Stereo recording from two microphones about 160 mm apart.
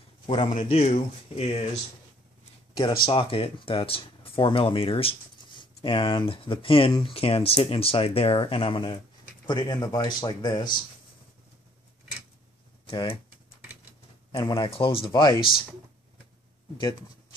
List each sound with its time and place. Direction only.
0.3 s speech: 40° left (ahead or behind)
2.8 s speech: 30° left (ahead or behind)
12.8 s speech: 30° left (ahead or behind)
14.3 s speech: 30° left (ahead or behind)